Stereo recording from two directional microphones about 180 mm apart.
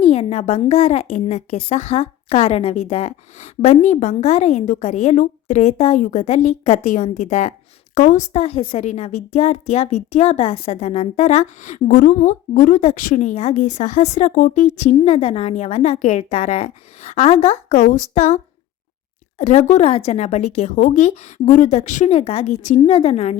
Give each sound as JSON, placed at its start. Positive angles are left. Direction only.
{"t": 0.0, "sound": "a woman's voice", "side_deg": 35}
{"t": 19.4, "sound": "a woman's voice", "side_deg": 40}